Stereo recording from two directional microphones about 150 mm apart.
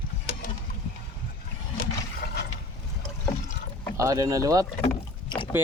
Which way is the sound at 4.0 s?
20° right (ahead or behind).